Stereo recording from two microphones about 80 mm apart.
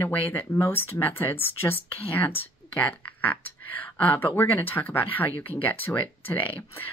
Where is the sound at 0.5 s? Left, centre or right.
Left.